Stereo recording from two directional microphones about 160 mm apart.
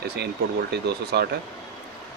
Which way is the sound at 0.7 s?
90° right.